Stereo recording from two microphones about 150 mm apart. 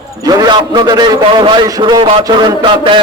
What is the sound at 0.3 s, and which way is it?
A man's voice, 25° right (ahead or behind).